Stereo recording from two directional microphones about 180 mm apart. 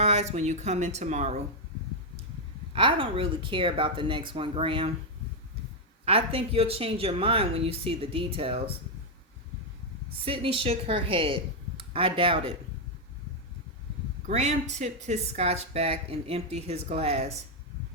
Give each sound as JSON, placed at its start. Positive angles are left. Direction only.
{"t": 0.0, "sound": "a woman's voice", "side_deg": -35}
{"t": 2.7, "sound": "speech", "side_deg": -30}
{"t": 6.1, "sound": "a woman's voice", "side_deg": -30}
{"t": 10.2, "sound": "a woman's voice", "side_deg": -30}
{"t": 14.3, "sound": "a woman's voice", "side_deg": -40}